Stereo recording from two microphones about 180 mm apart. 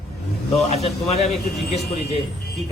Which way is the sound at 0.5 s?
35° left (ahead or behind).